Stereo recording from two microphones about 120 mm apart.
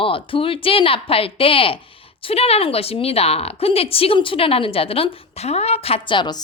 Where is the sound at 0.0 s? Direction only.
50° left (ahead or behind).